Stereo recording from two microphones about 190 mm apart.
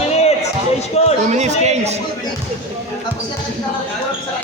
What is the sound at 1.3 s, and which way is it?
Speech, 35° right (ahead or behind).